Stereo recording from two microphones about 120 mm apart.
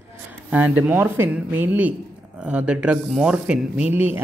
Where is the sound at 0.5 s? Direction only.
15° right (ahead or behind).